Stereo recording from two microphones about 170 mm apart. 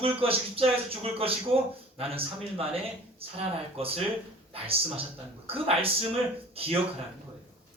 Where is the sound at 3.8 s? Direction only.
35° right (ahead or behind).